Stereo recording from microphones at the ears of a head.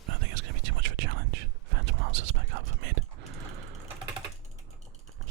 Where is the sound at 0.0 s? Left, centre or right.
Right.